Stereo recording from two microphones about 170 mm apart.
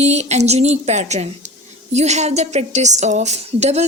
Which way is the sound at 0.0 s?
40° right (ahead or behind).